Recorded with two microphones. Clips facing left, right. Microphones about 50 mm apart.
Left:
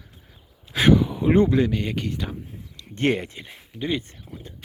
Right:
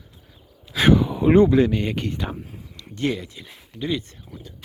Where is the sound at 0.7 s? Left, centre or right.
Left.